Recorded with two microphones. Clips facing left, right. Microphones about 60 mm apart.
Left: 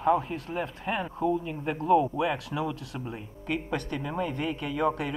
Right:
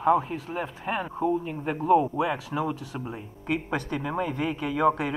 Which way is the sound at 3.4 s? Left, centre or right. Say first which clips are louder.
Right 2 dB; right.